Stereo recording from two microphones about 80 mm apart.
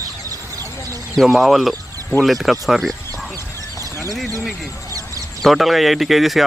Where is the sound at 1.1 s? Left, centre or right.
Centre.